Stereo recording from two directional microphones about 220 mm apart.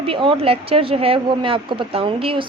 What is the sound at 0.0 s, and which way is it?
Speech, 25° right (ahead or behind).